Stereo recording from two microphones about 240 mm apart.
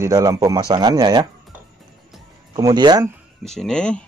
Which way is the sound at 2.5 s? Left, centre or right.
Centre.